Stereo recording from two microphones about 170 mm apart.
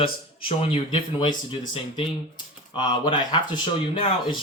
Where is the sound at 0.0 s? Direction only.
35° left (ahead or behind).